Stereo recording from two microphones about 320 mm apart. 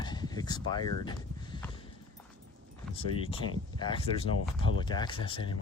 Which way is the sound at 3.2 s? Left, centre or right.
Centre.